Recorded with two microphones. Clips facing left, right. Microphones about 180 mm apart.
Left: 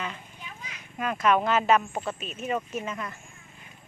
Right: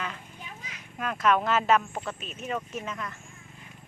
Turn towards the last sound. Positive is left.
turn(degrees=5)  # may be behind; listen again after turning